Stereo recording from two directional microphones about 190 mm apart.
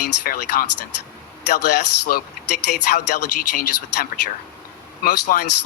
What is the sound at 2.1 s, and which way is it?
Speech, 50° left (ahead or behind).